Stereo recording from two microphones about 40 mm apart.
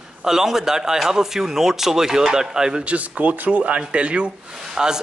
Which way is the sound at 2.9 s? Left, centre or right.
Right.